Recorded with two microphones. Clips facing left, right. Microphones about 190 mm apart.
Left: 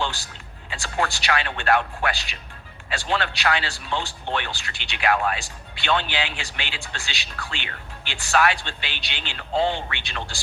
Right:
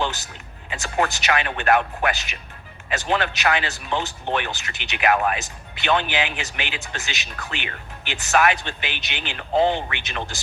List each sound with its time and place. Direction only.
0.7 s speech: 20° right (ahead or behind)